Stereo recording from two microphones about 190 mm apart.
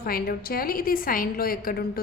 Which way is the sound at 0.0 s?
50° left (ahead or behind).